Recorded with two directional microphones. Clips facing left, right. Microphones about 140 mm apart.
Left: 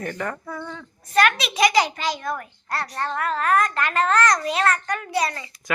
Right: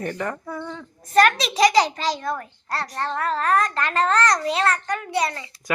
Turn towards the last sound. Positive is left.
turn(degrees=-25)  # may be behind; listen again after turning